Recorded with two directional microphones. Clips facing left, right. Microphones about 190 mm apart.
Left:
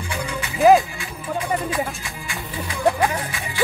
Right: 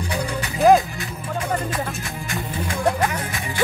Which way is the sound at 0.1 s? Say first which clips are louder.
Right 1 dB; 35° right (ahead or behind).